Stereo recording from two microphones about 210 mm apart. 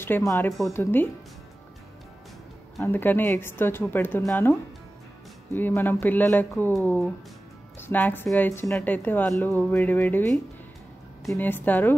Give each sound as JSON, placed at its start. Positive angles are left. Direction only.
{"t": 0.0, "sound": "a woman's voice", "side_deg": 10}
{"t": 2.8, "sound": "a woman's voice", "side_deg": 10}